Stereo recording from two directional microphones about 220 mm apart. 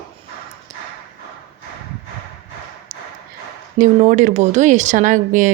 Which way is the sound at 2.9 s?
40° right (ahead or behind).